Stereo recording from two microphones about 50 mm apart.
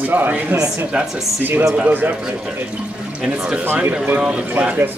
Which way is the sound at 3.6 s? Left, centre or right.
Right.